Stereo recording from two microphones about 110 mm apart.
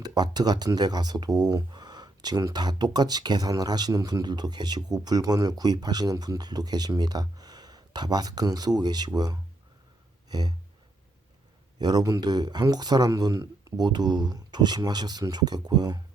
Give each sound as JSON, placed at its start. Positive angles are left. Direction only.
{"t": 0.0, "sound": "speech", "side_deg": -40}
{"t": 10.2, "sound": "a sound", "side_deg": -40}
{"t": 11.8, "sound": "speech", "side_deg": -40}